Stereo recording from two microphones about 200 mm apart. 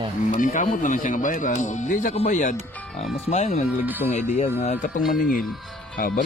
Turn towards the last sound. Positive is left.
turn(degrees=45)  # may be behind; listen again after turning